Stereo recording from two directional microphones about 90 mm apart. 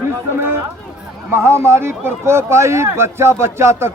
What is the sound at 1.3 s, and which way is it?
A man's voice, 30° right (ahead or behind).